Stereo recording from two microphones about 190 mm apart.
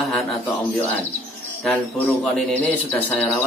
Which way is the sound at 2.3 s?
10° left (ahead or behind).